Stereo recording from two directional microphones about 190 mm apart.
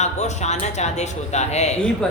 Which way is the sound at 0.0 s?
35° left (ahead or behind).